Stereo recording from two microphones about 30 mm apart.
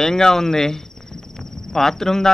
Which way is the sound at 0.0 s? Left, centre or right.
Centre.